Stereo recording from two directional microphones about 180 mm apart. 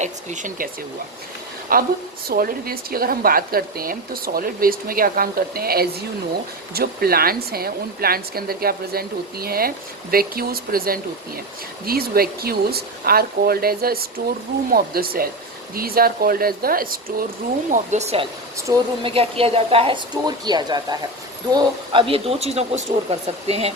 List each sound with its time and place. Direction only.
0.0 s speech: 45° right (ahead or behind)
1.7 s speech: 55° right (ahead or behind)
17.7 s speech: 40° right (ahead or behind)
18.7 s speech: 20° right (ahead or behind)
19.0 s speech: 30° right (ahead or behind)